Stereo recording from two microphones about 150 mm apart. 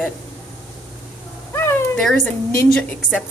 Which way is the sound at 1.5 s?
15° left (ahead or behind).